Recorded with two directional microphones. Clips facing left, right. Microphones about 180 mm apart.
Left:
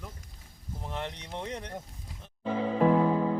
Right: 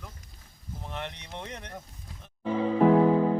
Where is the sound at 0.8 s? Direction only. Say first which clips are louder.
Left 1 dB; 10° left (ahead or behind).